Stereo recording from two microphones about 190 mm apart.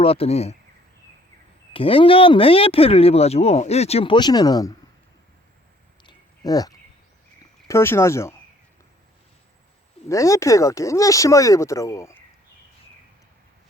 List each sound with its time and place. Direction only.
0.0 s speech: 30° left (ahead or behind)
1.7 s speech: 30° left (ahead or behind)
6.0 s a sound: 20° left (ahead or behind)
7.7 s speech: 15° left (ahead or behind)
10.1 s speech: 15° left (ahead or behind)